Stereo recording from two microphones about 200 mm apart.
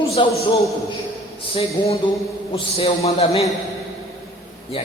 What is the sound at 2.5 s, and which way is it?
Speech, 30° left (ahead or behind).